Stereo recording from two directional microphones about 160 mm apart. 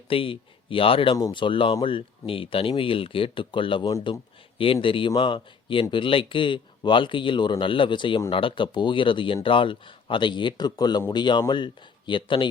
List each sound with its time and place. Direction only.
0.1 s speech: 35° left (ahead or behind)